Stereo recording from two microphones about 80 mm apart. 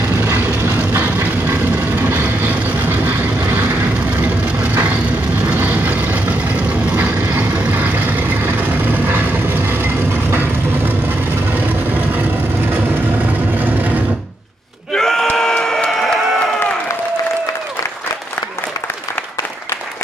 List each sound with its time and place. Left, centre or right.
0.2 s train: right
0.6 s vehicle: right
5.5 s vehicle: centre
11.5 s vehicle: right
15.0 s a sound: centre